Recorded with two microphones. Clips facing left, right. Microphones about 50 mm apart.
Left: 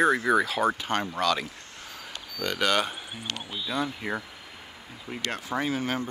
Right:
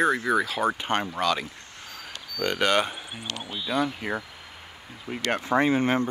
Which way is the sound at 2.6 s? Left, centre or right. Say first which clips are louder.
Right 1 dB; centre.